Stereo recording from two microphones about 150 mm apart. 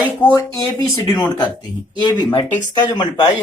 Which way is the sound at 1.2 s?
30° left (ahead or behind).